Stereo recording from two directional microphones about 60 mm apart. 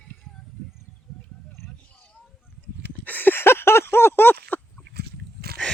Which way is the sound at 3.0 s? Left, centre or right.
Left.